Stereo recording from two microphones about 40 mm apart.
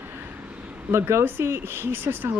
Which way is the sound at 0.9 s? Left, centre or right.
Right.